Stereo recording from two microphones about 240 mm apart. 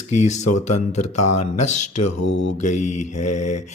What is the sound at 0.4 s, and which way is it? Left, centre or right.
Speech, left.